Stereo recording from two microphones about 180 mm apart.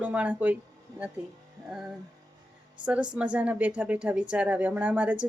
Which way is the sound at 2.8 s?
5° right (ahead or behind).